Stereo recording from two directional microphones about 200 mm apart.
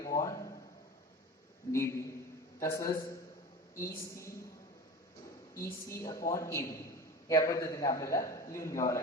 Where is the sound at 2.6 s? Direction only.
15° left (ahead or behind).